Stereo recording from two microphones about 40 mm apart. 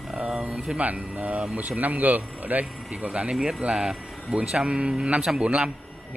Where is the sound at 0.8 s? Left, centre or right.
Right.